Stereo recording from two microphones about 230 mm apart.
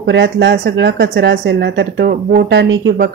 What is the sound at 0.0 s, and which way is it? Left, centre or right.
Speech, right.